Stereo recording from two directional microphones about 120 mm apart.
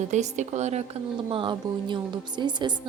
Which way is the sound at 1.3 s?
45° right (ahead or behind).